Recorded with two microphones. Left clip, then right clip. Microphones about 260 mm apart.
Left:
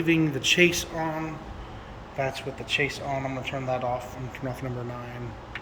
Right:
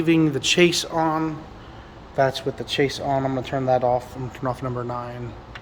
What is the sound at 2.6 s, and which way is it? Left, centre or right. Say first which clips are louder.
Speech: right 4 dB; right.